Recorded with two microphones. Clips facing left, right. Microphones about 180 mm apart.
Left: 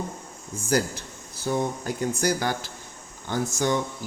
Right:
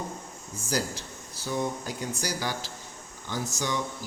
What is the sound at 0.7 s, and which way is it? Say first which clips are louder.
Speech: left 6 dB; 55° left (ahead or behind).